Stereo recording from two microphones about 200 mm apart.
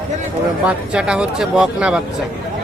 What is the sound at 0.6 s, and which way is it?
Speech, 5° right (ahead or behind).